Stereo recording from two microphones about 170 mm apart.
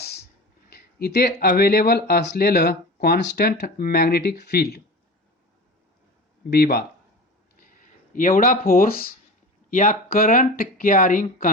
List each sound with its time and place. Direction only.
0.7 s speech: 65° left (ahead or behind)
6.5 s speech: 65° left (ahead or behind)
7.6 s a sound: 55° left (ahead or behind)
9.6 s speech: 50° left (ahead or behind)